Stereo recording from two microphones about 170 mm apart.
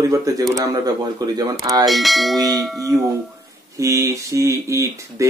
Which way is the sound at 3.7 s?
20° right (ahead or behind).